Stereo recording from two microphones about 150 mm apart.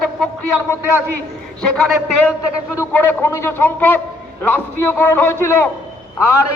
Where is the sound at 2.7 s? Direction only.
15° left (ahead or behind).